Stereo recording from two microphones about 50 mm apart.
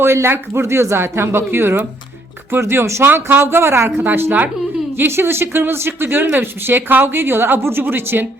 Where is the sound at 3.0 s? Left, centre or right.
Right.